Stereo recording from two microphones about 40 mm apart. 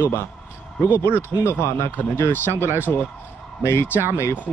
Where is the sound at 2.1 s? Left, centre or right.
Left.